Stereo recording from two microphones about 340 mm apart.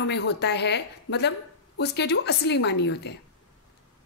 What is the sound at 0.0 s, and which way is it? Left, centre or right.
A woman's voice, left.